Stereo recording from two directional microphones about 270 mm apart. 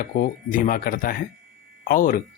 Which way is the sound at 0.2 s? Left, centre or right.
Left.